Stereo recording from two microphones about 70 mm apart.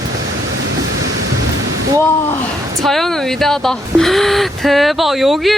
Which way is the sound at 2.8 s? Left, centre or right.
Centre.